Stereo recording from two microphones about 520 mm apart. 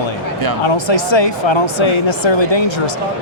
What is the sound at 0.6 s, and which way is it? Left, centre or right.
Speech, left.